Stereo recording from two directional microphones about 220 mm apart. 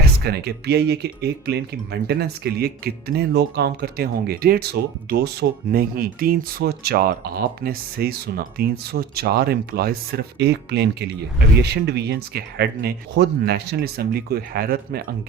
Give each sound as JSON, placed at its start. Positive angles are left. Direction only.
{"t": 0.3, "sound": "speech", "side_deg": -45}